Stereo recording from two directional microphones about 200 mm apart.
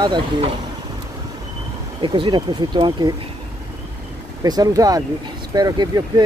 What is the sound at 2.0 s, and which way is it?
Speech, 25° right (ahead or behind).